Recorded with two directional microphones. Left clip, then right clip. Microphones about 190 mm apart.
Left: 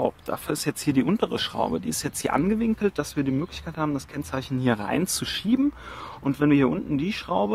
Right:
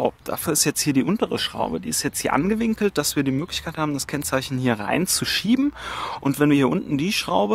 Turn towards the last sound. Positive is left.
turn(degrees=-50)  # may be behind; listen again after turning